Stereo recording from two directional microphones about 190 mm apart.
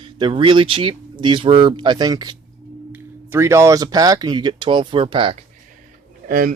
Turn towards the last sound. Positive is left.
turn(degrees=-50)  # may be behind; listen again after turning